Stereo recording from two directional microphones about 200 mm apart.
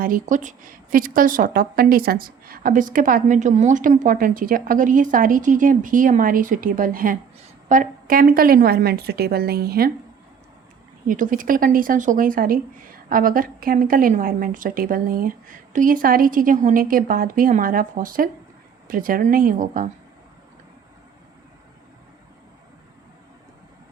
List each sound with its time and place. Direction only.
0.0 s a woman's voice: 40° right (ahead or behind)
11.1 s a woman's voice: 40° right (ahead or behind)